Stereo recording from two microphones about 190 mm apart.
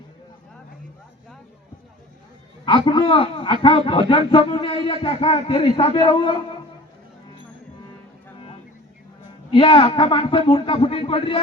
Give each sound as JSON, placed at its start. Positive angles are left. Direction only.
{"t": 2.6, "sound": "a man's voice", "side_deg": 25}
{"t": 9.5, "sound": "a man's voice", "side_deg": 25}